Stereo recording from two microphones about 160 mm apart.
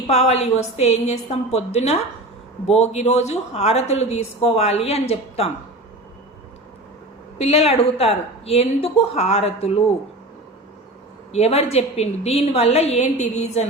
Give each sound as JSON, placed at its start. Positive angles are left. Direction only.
{"t": 0.1, "sound": "a woman's voice", "side_deg": 40}
{"t": 7.3, "sound": "a woman's voice", "side_deg": 45}
{"t": 11.3, "sound": "a woman's voice", "side_deg": 40}